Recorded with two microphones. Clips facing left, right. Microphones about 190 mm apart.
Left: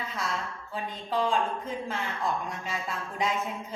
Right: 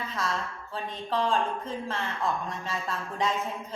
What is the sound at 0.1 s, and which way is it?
Speech, 15° left (ahead or behind).